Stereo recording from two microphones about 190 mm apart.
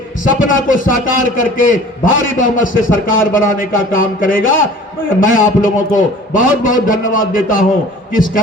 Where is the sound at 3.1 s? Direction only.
45° left (ahead or behind).